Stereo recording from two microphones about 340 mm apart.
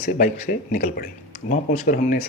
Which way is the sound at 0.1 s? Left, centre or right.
Left.